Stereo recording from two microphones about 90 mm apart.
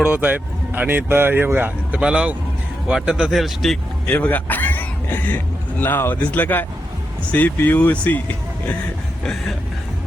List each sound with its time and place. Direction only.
0.0 s speech: 15° right (ahead or behind)
2.0 s speech: 10° right (ahead or behind)
4.0 s speech: 20° left (ahead or behind)
9.2 s speech: 5° left (ahead or behind)